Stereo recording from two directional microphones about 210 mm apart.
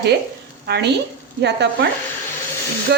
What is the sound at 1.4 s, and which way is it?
Sizzle, 55° right (ahead or behind).